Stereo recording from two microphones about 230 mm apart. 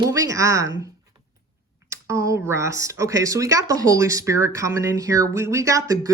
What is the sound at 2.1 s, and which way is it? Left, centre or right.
Speech, centre.